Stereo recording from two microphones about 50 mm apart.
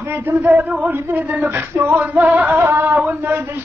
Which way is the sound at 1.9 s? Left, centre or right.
Right.